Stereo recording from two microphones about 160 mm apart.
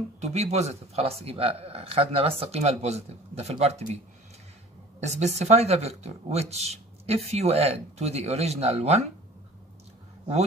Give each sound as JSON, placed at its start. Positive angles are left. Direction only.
{"t": 0.2, "sound": "speech", "side_deg": -45}
{"t": 5.0, "sound": "speech", "side_deg": -45}